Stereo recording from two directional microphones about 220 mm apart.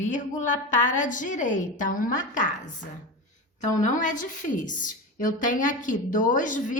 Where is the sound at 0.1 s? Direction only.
35° left (ahead or behind).